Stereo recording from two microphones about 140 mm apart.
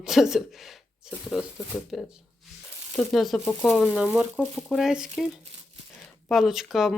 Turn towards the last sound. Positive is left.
turn(degrees=0)  # may be behind; listen again after turning